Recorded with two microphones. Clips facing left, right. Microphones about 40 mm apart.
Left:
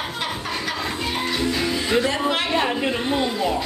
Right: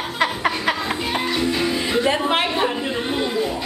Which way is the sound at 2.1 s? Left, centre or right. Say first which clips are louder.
Right 3 dB; right.